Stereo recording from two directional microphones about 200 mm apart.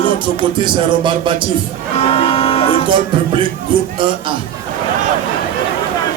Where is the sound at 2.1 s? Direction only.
30° left (ahead or behind).